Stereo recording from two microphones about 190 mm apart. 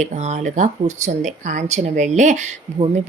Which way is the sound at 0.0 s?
40° right (ahead or behind).